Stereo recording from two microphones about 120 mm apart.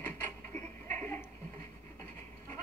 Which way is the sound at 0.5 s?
20° left (ahead or behind).